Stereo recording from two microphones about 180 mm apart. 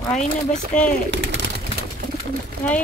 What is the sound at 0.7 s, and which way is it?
Speech, 45° left (ahead or behind).